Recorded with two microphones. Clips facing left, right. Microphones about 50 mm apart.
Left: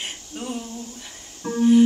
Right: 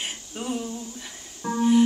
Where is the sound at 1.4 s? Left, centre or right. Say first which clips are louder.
Left 3 dB; right.